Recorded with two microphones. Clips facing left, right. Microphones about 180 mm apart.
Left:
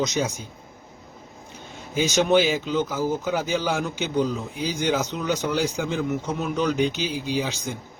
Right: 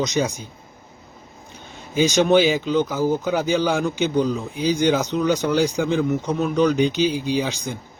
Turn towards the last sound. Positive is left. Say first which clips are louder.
# right 5 dB
turn(degrees=5)  # may be behind; listen again after turning